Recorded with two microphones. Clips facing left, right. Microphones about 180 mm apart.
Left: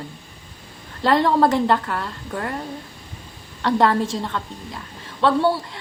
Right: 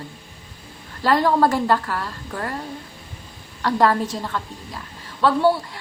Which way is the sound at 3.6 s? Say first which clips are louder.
Left 1 dB; 25° left (ahead or behind).